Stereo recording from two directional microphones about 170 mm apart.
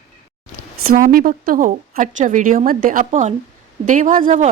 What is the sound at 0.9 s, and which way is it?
A woman's voice, 55° right (ahead or behind).